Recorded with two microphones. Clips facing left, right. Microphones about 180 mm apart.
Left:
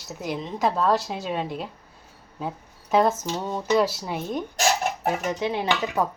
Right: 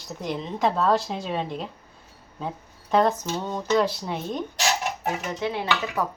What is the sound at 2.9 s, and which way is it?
A woman's voice, 5° left (ahead or behind).